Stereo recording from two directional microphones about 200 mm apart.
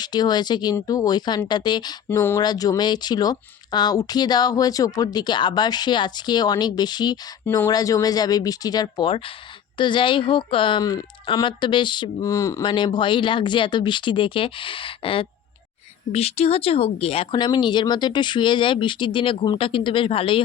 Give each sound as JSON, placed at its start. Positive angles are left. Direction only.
{"t": 0.0, "sound": "speech", "side_deg": 20}